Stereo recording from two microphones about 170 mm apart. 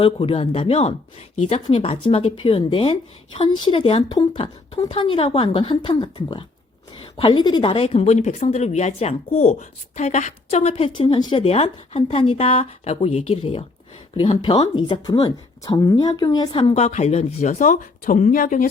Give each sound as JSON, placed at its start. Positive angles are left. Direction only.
{"t": 0.0, "sound": "a woman's voice", "side_deg": 35}